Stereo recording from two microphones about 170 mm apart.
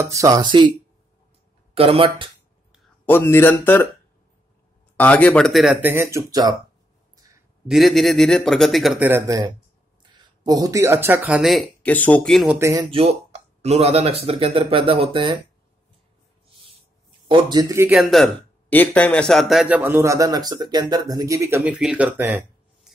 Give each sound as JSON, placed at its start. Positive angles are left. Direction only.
{"t": 0.0, "sound": "speech", "side_deg": -20}
{"t": 1.8, "sound": "speech", "side_deg": -35}
{"t": 3.1, "sound": "speech", "side_deg": 15}
{"t": 4.9, "sound": "speech", "side_deg": 10}
{"t": 5.8, "sound": "speech", "side_deg": -15}
{"t": 7.6, "sound": "speech", "side_deg": 0}
{"t": 9.0, "sound": "speech", "side_deg": -15}
{"t": 12.4, "sound": "speech", "side_deg": -15}
{"t": 12.9, "sound": "speech", "side_deg": -35}
{"t": 17.3, "sound": "speech", "side_deg": -25}
{"t": 17.9, "sound": "speech", "side_deg": 0}